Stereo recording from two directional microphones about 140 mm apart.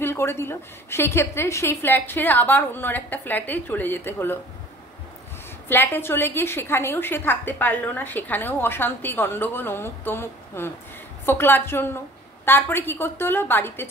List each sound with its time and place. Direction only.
0.0 s a woman's voice: 20° left (ahead or behind)
5.7 s a woman's voice: 15° left (ahead or behind)